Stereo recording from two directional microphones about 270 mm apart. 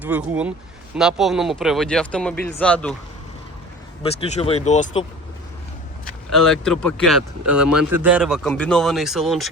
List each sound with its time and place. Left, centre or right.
0.0 s speech: centre
4.0 s speech: left
6.3 s speech: centre